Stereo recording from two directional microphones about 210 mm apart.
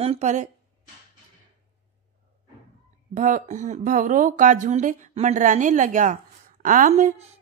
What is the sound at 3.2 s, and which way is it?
A woman's voice, 35° right (ahead or behind).